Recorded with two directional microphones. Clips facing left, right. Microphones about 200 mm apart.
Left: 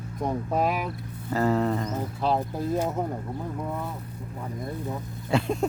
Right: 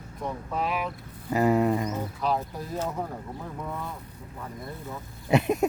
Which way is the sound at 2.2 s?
30° left (ahead or behind).